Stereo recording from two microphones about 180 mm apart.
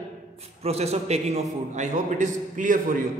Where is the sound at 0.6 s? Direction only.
35° right (ahead or behind).